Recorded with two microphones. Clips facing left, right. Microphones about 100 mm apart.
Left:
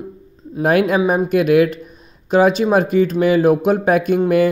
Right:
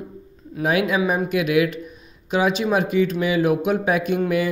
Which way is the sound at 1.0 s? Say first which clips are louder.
Left 5 dB; 30° left (ahead or behind).